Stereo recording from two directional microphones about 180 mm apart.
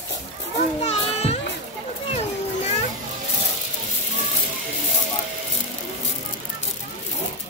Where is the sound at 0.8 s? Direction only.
35° left (ahead or behind).